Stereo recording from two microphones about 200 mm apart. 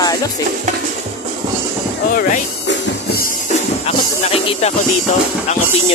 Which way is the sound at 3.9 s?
30° left (ahead or behind).